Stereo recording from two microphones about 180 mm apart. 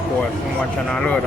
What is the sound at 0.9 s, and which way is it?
Speech, 5° left (ahead or behind).